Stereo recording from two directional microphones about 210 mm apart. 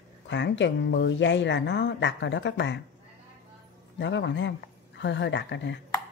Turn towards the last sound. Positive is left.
turn(degrees=60)  # may be behind; listen again after turning